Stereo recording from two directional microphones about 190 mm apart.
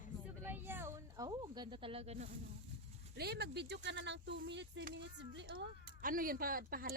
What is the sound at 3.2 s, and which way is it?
Speech, 60° right (ahead or behind).